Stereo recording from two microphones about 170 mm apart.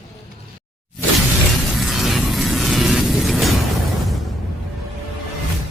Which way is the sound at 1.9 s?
Centre (ahead or behind).